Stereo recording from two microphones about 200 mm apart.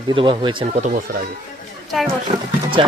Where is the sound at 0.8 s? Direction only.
45° right (ahead or behind).